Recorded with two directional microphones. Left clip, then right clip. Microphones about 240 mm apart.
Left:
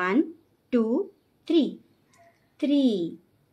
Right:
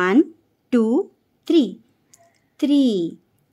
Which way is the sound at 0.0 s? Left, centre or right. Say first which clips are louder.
Right 7 dB; right.